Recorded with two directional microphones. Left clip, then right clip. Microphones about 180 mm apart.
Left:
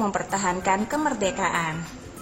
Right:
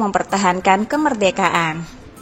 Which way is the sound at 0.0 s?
35° right (ahead or behind).